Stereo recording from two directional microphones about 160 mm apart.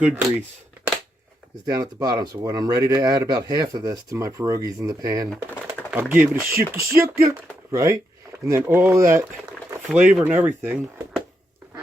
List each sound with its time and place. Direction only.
1.6 s speech: 25° right (ahead or behind)
9.9 s speech: 5° right (ahead or behind)